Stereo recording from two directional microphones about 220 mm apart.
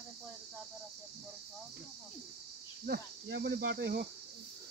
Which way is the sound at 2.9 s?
50° right (ahead or behind).